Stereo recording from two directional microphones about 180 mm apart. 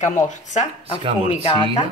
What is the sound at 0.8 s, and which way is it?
Speech, 35° right (ahead or behind).